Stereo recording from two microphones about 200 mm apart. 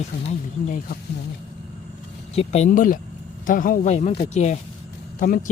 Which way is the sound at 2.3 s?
35° left (ahead or behind).